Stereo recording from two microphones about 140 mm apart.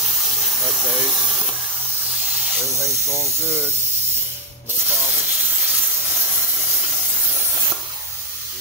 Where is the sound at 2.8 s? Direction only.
20° right (ahead or behind).